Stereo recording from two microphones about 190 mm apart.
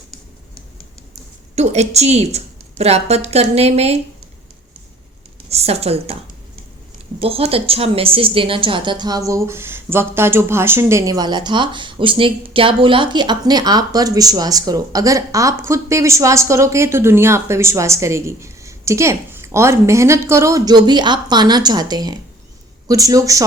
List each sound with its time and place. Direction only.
1.5 s a woman's voice: 35° right (ahead or behind)
5.5 s a woman's voice: 35° right (ahead or behind)
7.2 s a woman's voice: 30° right (ahead or behind)